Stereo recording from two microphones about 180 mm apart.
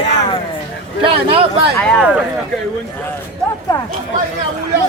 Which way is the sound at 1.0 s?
30° right (ahead or behind).